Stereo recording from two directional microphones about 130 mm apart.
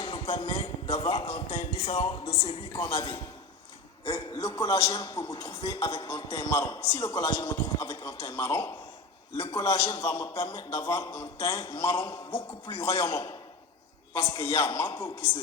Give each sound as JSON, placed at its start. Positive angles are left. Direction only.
{"t": 0.0, "sound": "a sound", "side_deg": 50}
{"t": 0.6, "sound": "a man's voice", "side_deg": 50}
{"t": 2.9, "sound": "a man's voice", "side_deg": 35}
{"t": 4.4, "sound": "a man's voice", "side_deg": 30}